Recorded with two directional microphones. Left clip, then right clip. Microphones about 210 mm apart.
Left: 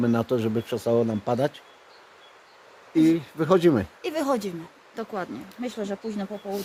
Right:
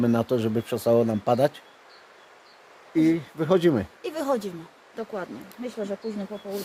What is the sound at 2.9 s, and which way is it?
Speech, 5° left (ahead or behind).